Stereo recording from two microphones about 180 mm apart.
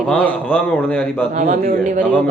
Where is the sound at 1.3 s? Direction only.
45° right (ahead or behind).